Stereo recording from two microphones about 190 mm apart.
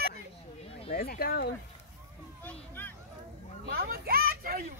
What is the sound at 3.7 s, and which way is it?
Children playing, 55° right (ahead or behind).